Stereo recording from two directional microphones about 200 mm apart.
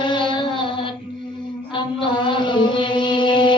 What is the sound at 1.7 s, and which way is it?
Mantra, 25° left (ahead or behind).